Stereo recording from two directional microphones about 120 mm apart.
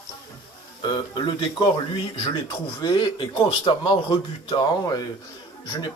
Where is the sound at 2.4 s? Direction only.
40° left (ahead or behind).